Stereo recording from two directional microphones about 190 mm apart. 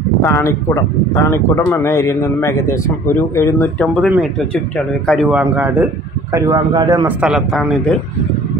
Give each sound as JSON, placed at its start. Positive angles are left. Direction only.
{"t": 0.2, "sound": "speech", "side_deg": 15}
{"t": 5.4, "sound": "a man's voice", "side_deg": -10}
{"t": 7.1, "sound": "speech", "side_deg": -5}